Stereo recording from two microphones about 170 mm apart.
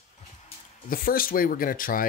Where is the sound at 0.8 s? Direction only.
60° left (ahead or behind).